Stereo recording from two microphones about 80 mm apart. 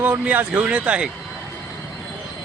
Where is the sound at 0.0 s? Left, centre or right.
Centre.